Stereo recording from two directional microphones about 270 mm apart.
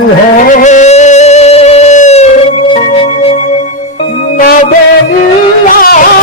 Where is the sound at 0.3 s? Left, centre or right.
Left.